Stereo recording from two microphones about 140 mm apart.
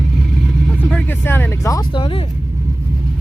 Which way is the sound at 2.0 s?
40° left (ahead or behind).